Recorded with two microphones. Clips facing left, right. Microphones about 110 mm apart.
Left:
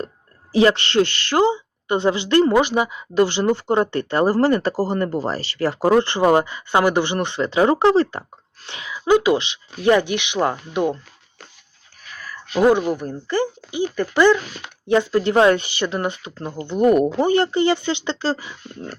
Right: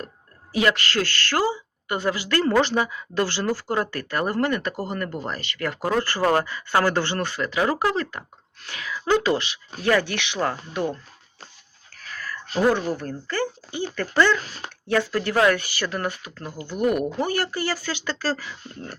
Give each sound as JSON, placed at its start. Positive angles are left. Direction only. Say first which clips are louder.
{"t": 0.5, "sound": "speech", "louder": "left 6 dB", "side_deg": 30}
{"t": 12.1, "sound": "a sound", "louder": "right 2 dB", "side_deg": 15}
{"t": 12.5, "sound": "speech", "louder": "left 5 dB", "side_deg": 15}